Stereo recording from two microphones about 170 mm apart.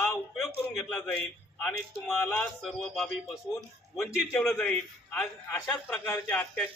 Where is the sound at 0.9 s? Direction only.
5° left (ahead or behind).